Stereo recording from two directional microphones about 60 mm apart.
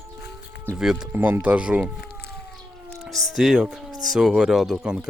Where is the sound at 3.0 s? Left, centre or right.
Centre.